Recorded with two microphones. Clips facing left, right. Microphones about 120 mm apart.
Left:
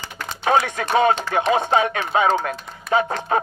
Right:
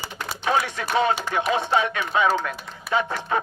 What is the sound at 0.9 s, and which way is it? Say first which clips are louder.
A man's voice: left 4 dB; 50° left (ahead or behind).